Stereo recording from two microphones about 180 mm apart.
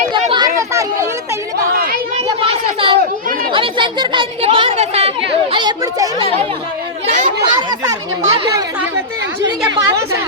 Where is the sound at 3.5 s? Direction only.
25° right (ahead or behind).